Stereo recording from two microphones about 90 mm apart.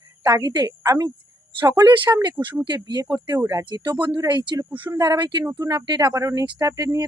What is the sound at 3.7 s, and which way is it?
Speech, 55° right (ahead or behind).